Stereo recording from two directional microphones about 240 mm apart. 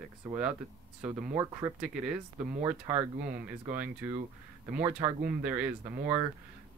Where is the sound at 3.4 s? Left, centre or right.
Centre.